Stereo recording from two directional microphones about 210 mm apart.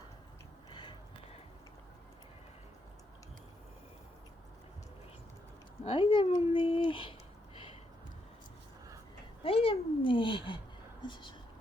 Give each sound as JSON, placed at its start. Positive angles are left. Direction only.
{"t": 0.7, "sound": "a sound", "side_deg": 20}
{"t": 5.8, "sound": "speech", "side_deg": 25}
{"t": 9.4, "sound": "speech", "side_deg": 25}